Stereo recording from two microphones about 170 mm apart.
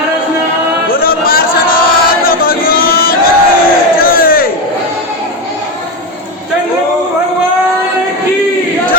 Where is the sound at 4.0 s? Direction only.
60° left (ahead or behind).